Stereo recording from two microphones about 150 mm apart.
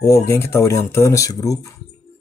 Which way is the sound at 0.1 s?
15° left (ahead or behind).